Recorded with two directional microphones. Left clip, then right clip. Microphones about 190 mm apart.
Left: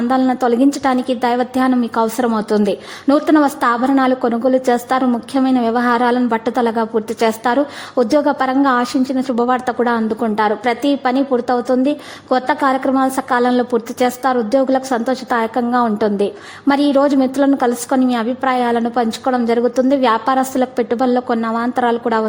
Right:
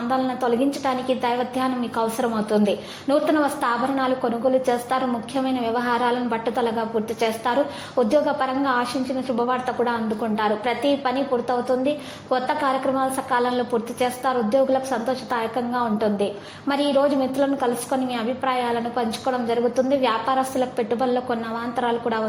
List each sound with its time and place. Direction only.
0.1 s a woman's voice: 40° left (ahead or behind)